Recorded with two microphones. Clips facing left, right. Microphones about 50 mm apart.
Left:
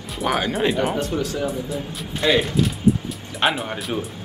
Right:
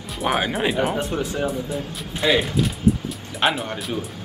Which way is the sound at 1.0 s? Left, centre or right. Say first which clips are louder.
Left 1 dB; centre.